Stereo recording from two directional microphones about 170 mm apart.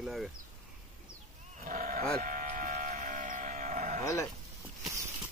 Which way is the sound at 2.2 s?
50° right (ahead or behind).